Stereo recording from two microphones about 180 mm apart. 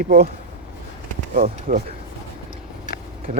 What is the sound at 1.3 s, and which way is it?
Speech, 50° right (ahead or behind).